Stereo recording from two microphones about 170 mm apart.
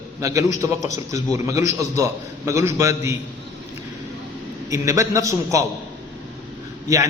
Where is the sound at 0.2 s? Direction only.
20° right (ahead or behind).